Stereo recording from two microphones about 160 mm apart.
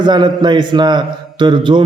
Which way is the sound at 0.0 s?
25° right (ahead or behind).